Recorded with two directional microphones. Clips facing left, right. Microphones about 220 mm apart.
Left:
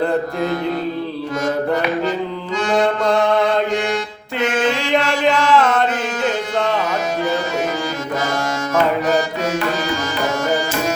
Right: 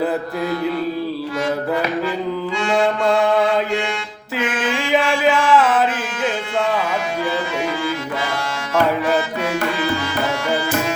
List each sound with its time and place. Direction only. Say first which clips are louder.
2.7 s mantra: left 1 dB; 5° right (ahead or behind)
4.4 s music: left 5 dB; 40° left (ahead or behind)
4.9 s chant: even; 5° right (ahead or behind)